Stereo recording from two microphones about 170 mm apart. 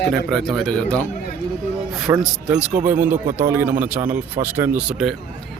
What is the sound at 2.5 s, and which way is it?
Speech, 5° right (ahead or behind).